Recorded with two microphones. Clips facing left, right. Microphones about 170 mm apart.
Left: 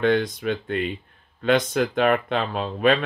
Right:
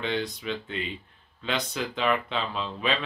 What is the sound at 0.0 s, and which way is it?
Speech, 55° left (ahead or behind).